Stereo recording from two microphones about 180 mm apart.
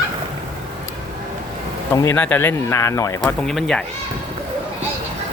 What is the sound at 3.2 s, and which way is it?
Speech, 5° left (ahead or behind).